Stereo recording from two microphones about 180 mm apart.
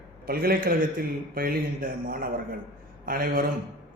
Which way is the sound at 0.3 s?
55° right (ahead or behind).